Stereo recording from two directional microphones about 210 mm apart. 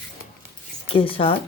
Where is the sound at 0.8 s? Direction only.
25° left (ahead or behind).